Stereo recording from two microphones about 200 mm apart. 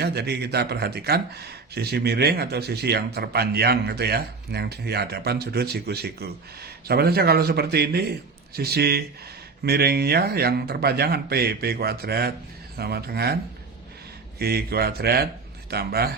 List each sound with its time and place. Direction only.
0.0 s speech: 55° right (ahead or behind)